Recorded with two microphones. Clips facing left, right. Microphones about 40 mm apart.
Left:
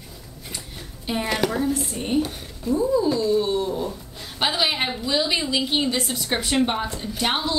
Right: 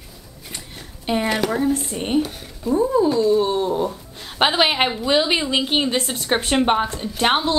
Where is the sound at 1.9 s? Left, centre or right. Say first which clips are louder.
Right 3 dB; right.